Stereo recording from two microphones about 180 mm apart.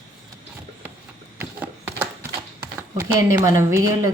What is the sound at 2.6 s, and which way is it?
Speech, 15° right (ahead or behind).